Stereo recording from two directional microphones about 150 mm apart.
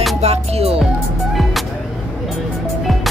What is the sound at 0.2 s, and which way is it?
Music, 45° right (ahead or behind).